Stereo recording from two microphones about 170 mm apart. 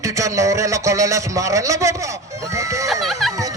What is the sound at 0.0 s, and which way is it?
A man's voice, 20° right (ahead or behind).